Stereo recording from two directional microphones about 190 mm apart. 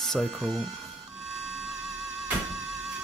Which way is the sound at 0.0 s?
Centre (ahead or behind).